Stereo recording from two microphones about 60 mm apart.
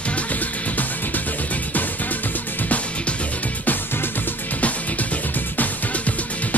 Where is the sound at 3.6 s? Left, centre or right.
Left.